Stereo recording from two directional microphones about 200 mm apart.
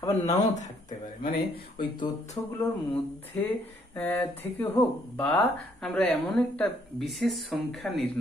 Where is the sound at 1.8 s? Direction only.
25° left (ahead or behind).